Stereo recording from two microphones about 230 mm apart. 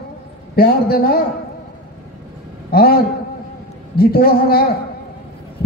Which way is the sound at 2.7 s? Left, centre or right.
Left.